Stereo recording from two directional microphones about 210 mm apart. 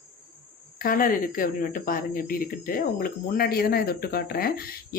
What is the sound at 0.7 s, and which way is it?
Speech, 40° left (ahead or behind).